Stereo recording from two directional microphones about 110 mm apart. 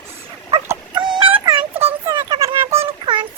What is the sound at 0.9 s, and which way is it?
Child singing, 45° right (ahead or behind).